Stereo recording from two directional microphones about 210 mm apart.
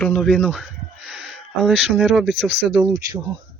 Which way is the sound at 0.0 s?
5° left (ahead or behind).